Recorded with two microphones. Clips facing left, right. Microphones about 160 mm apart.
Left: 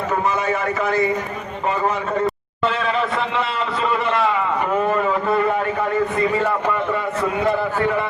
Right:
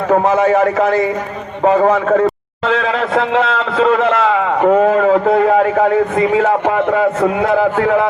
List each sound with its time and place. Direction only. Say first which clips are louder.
0.1 s a man's voice: right 11 dB; 90° right
2.6 s a man's voice: right 5 dB; 90° right
4.8 s a sound: right 8 dB; 90° right
7.3 s a man's voice: right 6 dB; 90° right